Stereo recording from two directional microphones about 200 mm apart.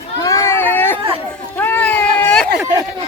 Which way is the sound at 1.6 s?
10° left (ahead or behind).